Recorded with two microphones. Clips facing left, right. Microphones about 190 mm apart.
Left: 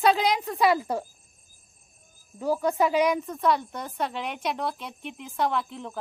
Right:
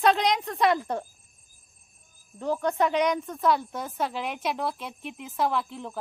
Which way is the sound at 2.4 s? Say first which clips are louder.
Left 2 dB; 5° left (ahead or behind).